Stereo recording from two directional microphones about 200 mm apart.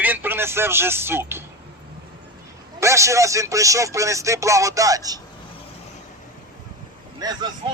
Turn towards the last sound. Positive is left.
turn(degrees=-20)  # may be behind; listen again after turning